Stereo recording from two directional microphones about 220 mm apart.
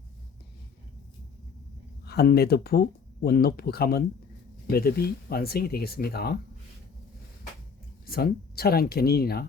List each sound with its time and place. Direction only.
2.0 s speech: 45° left (ahead or behind)
8.0 s speech: 45° left (ahead or behind)